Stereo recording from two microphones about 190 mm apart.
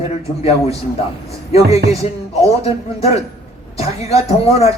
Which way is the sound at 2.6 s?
30° left (ahead or behind).